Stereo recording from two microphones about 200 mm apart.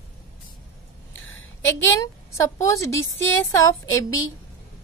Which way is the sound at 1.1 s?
70° left (ahead or behind).